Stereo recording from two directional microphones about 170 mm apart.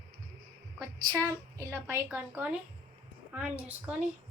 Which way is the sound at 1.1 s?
20° right (ahead or behind).